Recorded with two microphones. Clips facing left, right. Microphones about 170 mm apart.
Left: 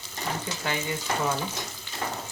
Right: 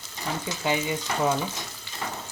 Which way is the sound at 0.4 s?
15° right (ahead or behind).